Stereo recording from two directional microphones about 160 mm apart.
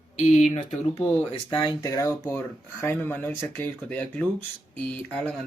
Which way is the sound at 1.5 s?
30° left (ahead or behind).